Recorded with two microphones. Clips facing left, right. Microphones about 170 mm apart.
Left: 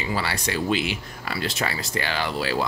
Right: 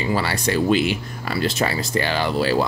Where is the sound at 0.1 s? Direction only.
45° right (ahead or behind).